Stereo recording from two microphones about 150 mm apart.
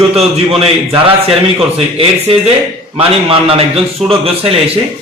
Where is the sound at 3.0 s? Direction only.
40° right (ahead or behind).